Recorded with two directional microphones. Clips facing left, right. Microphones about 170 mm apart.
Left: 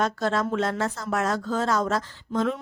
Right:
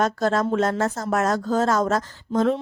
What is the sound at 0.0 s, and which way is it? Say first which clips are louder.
A woman's voice: right 4 dB; 40° right (ahead or behind).